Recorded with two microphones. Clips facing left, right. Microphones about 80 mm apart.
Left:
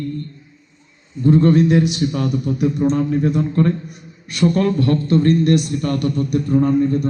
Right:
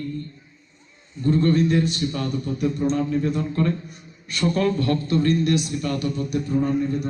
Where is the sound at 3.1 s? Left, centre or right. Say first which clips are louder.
Left 5 dB; left.